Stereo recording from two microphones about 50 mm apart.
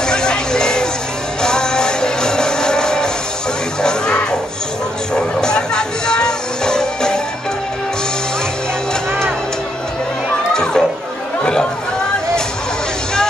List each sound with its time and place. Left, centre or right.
0.0 s music: centre
10.5 s children playing: centre